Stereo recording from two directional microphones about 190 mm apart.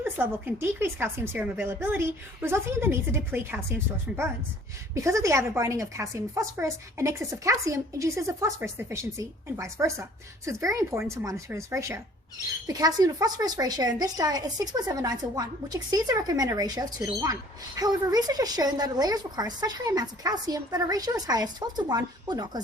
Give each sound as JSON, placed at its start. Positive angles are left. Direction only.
{"t": 0.0, "sound": "a woman's voice", "side_deg": -10}
{"t": 4.9, "sound": "a woman's voice", "side_deg": -15}